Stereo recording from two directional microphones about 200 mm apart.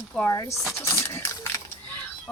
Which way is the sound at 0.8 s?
15° left (ahead or behind).